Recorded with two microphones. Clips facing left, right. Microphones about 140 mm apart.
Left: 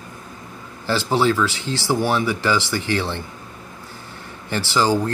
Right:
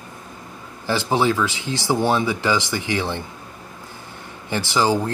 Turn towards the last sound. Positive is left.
turn(degrees=-15)  # may be behind; listen again after turning